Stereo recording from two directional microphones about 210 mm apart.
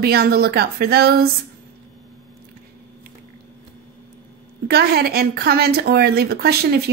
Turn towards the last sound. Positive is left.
turn(degrees=-50)  # may be behind; listen again after turning